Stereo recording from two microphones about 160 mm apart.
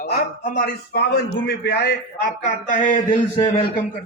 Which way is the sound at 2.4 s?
55° left (ahead or behind).